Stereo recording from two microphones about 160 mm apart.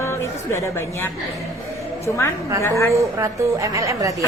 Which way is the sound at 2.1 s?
15° left (ahead or behind).